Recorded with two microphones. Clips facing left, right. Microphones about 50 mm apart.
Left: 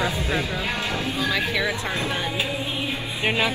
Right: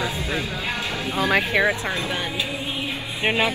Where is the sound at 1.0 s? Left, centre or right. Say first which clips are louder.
Right 6 dB; right.